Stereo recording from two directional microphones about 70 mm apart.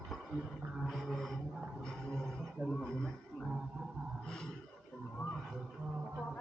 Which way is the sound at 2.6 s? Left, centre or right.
Centre.